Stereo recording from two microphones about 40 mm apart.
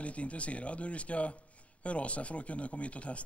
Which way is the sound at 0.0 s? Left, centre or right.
Left.